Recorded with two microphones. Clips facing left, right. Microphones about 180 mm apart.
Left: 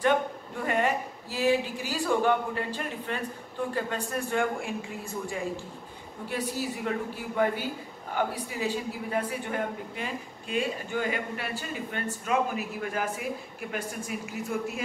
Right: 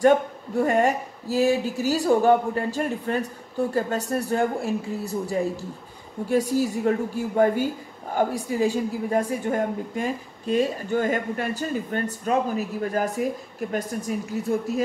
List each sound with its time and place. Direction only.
0.0 s a woman's voice: 45° right (ahead or behind)